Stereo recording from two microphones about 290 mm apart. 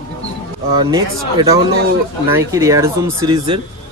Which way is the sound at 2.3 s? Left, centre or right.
Centre.